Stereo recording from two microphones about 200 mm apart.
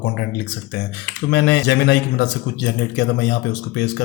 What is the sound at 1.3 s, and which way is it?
Speech, 55° left (ahead or behind).